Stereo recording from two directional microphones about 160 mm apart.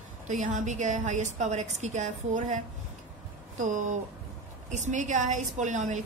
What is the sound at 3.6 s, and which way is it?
Speech, 50° right (ahead or behind).